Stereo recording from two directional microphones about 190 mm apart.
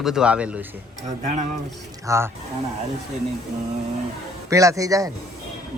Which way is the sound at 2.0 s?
15° right (ahead or behind).